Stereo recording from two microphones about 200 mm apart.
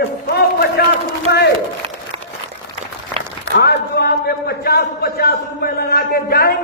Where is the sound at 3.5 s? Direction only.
55° left (ahead or behind).